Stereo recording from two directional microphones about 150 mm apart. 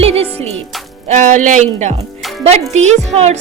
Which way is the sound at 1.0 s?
50° right (ahead or behind).